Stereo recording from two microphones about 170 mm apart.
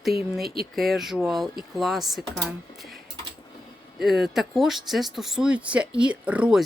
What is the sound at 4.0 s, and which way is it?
A woman's voice, centre (ahead or behind).